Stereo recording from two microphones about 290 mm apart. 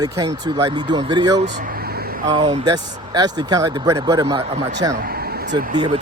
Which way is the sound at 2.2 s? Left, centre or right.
Centre.